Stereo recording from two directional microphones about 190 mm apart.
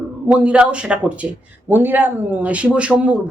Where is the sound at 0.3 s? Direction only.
5° right (ahead or behind).